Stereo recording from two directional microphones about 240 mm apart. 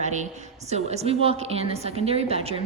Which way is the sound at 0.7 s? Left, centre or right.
Right.